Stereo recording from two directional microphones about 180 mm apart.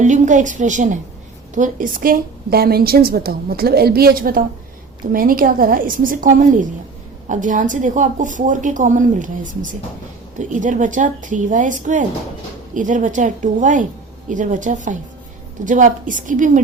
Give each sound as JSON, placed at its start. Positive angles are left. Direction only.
{"t": 0.0, "sound": "a woman's voice", "side_deg": -45}